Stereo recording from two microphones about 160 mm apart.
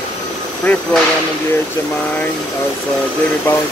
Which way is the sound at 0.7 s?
10° left (ahead or behind).